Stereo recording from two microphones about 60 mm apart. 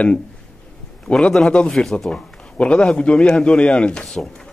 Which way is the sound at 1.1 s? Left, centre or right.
Centre.